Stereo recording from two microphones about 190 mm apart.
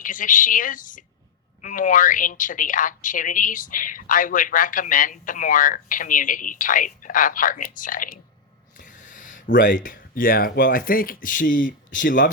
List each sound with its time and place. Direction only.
0.0 s speech: 45° left (ahead or behind)
8.8 s a sound: 45° left (ahead or behind)
9.6 s speech: 45° left (ahead or behind)